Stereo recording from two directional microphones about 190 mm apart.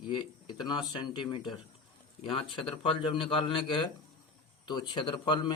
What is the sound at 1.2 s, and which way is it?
A man's voice, 25° left (ahead or behind).